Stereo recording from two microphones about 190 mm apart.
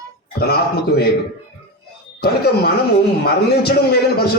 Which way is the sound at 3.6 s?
55° left (ahead or behind).